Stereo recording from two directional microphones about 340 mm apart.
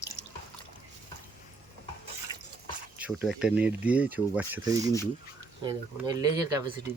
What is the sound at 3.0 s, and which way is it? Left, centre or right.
Speech, centre.